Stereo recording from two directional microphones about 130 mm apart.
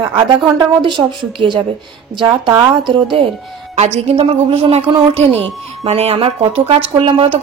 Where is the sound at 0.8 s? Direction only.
40° right (ahead or behind).